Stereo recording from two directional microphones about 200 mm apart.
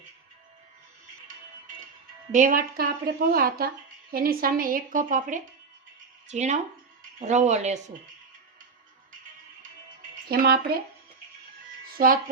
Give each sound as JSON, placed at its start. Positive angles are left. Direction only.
{"t": 2.3, "sound": "a woman's voice", "side_deg": -40}
{"t": 10.2, "sound": "a woman's voice", "side_deg": -50}
{"t": 11.9, "sound": "a woman's voice", "side_deg": -45}